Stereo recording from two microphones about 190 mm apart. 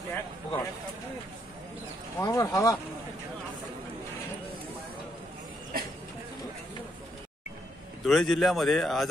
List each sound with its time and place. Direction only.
0.1 s speech: 15° left (ahead or behind)
2.1 s speech: 20° left (ahead or behind)
8.0 s speech: centre (ahead or behind)